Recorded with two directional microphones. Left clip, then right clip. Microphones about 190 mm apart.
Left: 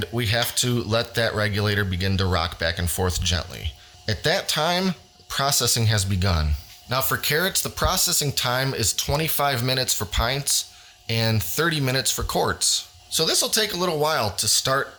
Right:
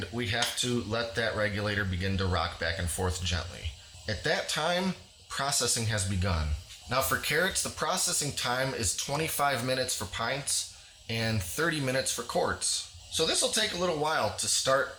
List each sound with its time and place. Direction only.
0.0 s speech: 50° left (ahead or behind)